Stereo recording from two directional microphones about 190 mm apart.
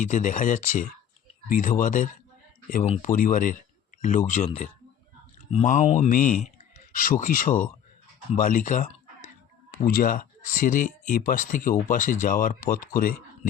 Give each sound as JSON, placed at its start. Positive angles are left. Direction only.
{"t": 0.0, "sound": "speech", "side_deg": 40}